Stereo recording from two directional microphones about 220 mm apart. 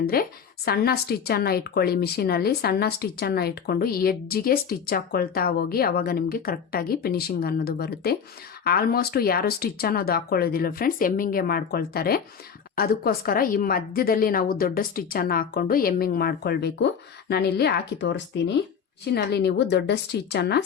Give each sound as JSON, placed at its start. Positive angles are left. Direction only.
{"t": 0.0, "sound": "a woman's voice", "side_deg": 40}